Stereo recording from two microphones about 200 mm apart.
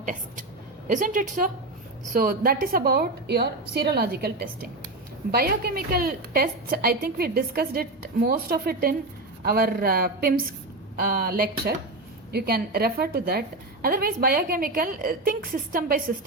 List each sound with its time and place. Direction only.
0.0 s a sound: 40° right (ahead or behind)
0.9 s a woman's voice: 40° right (ahead or behind)
5.3 s a woman's voice: 50° right (ahead or behind)